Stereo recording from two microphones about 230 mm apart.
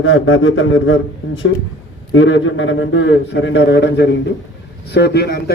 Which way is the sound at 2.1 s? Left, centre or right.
Left.